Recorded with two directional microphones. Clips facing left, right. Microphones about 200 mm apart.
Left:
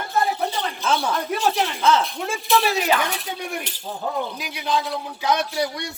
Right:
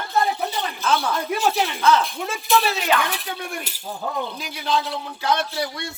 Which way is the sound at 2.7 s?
10° left (ahead or behind).